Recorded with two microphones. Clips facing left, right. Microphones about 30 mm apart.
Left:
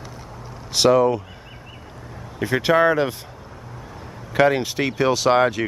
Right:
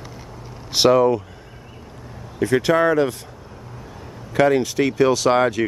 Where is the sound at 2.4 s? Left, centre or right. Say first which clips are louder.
Even; centre.